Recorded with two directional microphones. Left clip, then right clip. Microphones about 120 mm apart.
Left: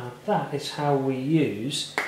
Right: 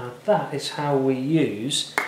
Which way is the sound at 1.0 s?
40° right (ahead or behind).